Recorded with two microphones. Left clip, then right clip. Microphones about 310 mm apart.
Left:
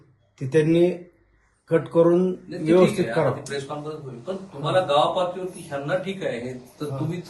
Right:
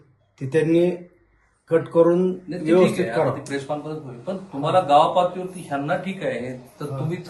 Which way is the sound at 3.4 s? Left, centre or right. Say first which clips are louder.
Right 3 dB; right.